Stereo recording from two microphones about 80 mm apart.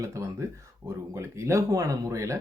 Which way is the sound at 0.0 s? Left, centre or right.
Right.